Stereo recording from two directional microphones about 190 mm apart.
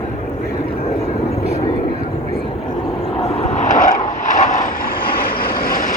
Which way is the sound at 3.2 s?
35° left (ahead or behind).